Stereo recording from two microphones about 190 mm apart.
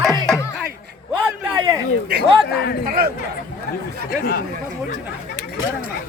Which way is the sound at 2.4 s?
60° left (ahead or behind).